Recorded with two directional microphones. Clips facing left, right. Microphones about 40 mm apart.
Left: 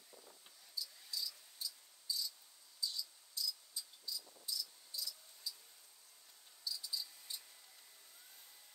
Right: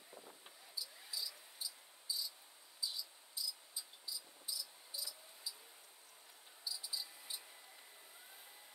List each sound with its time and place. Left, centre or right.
0.7 s cricket: centre
6.6 s cricket: centre